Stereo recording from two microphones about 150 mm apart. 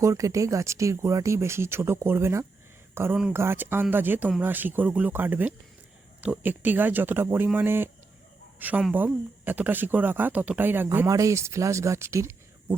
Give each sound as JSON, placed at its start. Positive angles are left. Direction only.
{"t": 0.0, "sound": "speech", "side_deg": -20}